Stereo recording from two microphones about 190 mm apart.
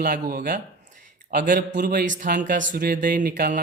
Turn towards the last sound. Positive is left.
turn(degrees=-45)  # may be behind; listen again after turning